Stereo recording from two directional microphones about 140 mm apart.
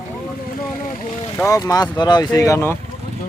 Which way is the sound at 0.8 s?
60° left (ahead or behind).